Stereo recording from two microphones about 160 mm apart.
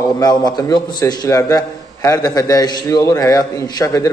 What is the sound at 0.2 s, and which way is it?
A man's voice, 25° left (ahead or behind).